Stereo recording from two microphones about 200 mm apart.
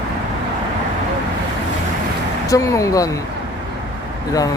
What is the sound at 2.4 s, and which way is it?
Speech, 15° left (ahead or behind).